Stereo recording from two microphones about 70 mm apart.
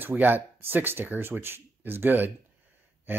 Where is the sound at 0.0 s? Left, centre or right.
Right.